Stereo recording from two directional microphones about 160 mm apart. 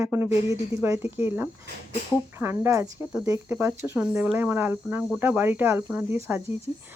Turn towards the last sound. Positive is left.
turn(degrees=-15)  # may be behind; listen again after turning